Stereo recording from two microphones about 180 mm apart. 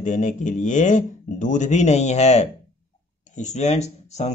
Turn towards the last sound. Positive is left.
turn(degrees=40)  # may be behind; listen again after turning